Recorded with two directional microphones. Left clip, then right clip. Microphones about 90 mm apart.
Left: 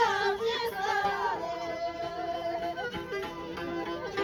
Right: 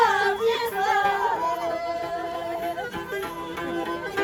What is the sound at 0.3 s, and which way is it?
Music, 20° left (ahead or behind).